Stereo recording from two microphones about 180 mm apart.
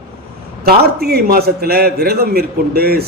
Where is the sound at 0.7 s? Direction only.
60° right (ahead or behind).